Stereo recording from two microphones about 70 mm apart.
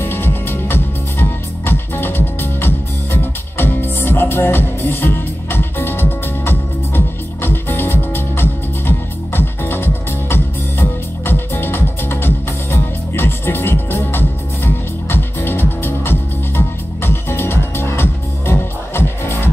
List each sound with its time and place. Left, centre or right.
0.0 s music: left